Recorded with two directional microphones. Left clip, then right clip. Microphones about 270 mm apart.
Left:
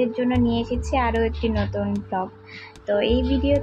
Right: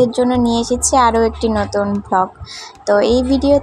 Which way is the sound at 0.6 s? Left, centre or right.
Right.